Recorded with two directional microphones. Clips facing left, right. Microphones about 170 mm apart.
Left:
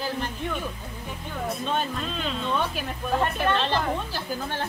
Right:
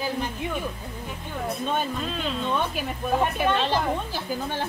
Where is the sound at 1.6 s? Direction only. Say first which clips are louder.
Right 2 dB; 5° right (ahead or behind).